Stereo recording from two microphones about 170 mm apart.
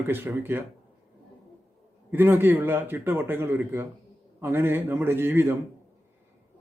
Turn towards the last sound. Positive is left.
turn(degrees=-15)  # may be behind; listen again after turning